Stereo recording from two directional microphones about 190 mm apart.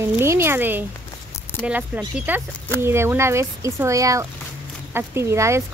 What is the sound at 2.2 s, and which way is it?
Speech, 10° right (ahead or behind).